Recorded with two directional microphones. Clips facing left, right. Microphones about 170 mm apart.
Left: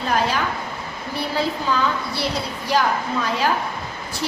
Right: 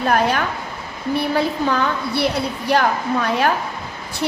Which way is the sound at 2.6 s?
60° right (ahead or behind).